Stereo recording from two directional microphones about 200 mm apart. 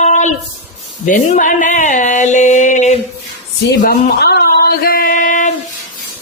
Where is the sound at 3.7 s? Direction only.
55° left (ahead or behind).